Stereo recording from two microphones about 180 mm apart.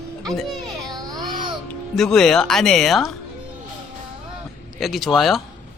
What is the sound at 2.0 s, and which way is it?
Speech, 5° left (ahead or behind).